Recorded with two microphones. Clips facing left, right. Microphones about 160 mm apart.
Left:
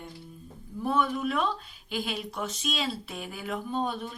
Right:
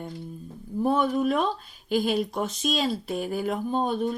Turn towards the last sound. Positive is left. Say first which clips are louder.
# right 6 dB
turn(degrees=-40)  # may be behind; listen again after turning